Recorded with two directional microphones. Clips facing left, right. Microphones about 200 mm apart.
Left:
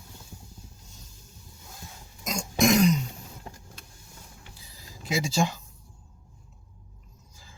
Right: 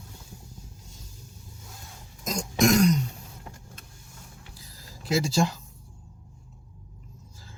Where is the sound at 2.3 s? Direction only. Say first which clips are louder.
Right 1 dB; centre (ahead or behind).